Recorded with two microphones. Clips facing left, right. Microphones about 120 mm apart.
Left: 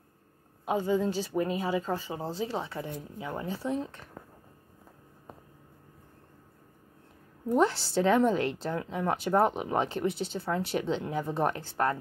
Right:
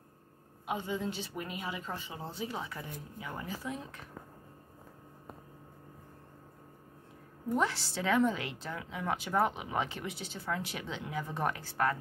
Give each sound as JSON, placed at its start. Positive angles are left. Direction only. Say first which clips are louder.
{"t": 0.7, "sound": "speech", "louder": "left 8 dB", "side_deg": 40}
{"t": 7.5, "sound": "a woman's voice", "louder": "left 7 dB", "side_deg": 30}